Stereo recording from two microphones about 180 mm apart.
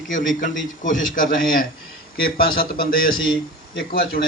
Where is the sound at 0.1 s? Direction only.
45° left (ahead or behind).